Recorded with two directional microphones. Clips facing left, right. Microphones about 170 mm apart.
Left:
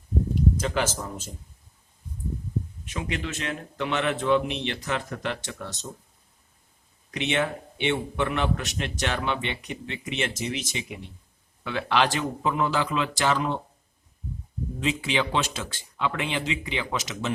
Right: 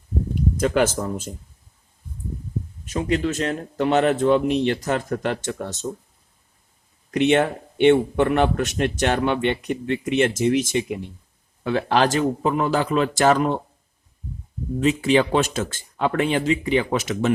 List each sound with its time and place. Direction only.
0.5 s a man's voice: 55° right (ahead or behind)
2.8 s a man's voice: 40° right (ahead or behind)
7.1 s a man's voice: 50° right (ahead or behind)
14.8 s a man's voice: 45° right (ahead or behind)